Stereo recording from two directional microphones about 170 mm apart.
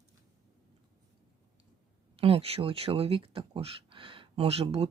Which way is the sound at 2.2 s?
35° right (ahead or behind).